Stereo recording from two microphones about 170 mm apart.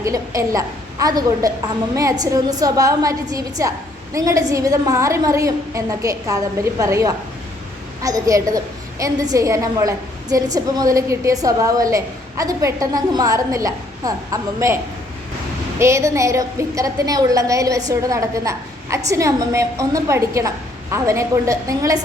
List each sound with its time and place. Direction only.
0.0 s a woman's voice: 20° right (ahead or behind)
15.8 s a woman's voice: 15° right (ahead or behind)